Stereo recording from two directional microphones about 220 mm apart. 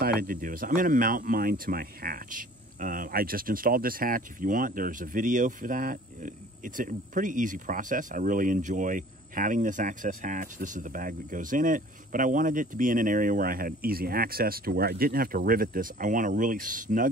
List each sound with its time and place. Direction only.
0.0 s speech: 40° right (ahead or behind)